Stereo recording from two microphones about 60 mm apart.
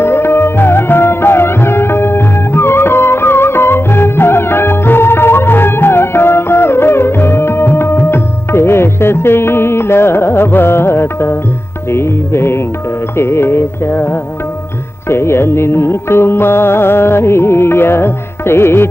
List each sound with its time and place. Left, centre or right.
0.0 s music: left